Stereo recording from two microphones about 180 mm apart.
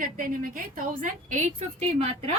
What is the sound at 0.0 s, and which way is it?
A woman's voice, 50° right (ahead or behind).